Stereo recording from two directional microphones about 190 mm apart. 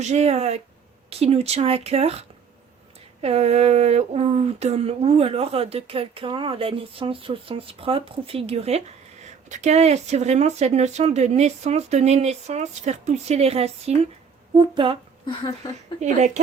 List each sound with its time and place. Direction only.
0.0 s speech: 35° right (ahead or behind)
16.0 s speech: 40° right (ahead or behind)